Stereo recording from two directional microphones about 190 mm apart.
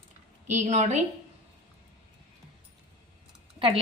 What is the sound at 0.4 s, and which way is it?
Speech, 40° right (ahead or behind).